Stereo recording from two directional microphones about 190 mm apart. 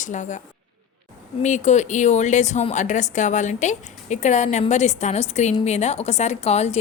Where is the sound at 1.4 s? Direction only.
40° left (ahead or behind).